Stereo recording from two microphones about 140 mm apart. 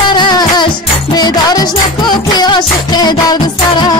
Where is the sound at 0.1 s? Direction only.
30° left (ahead or behind).